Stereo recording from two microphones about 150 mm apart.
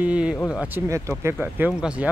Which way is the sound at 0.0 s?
10° right (ahead or behind).